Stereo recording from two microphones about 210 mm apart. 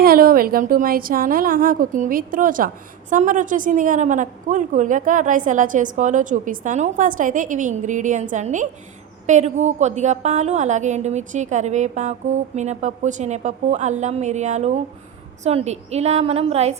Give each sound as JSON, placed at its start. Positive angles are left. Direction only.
{"t": 0.0, "sound": "a woman's voice", "side_deg": -45}